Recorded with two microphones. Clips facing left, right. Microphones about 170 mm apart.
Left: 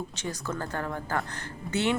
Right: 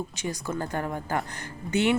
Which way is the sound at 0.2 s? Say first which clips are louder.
Right 3 dB; 15° right (ahead or behind).